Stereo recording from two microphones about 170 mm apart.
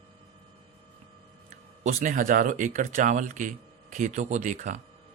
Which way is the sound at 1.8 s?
45° right (ahead or behind).